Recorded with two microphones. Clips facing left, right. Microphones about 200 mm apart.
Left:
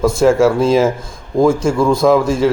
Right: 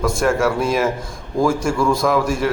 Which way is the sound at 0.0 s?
25° left (ahead or behind).